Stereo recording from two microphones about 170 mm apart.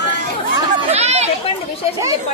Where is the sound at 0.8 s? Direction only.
40° right (ahead or behind).